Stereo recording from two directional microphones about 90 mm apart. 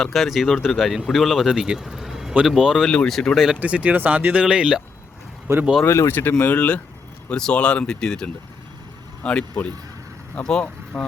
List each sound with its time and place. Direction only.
0.0 s speech: centre (ahead or behind)
2.9 s speech: 5° left (ahead or behind)
3.6 s speech: 15° right (ahead or behind)
5.5 s speech: 35° right (ahead or behind)
5.8 s speech: 30° left (ahead or behind); by 11.0 s 10° left (ahead or behind)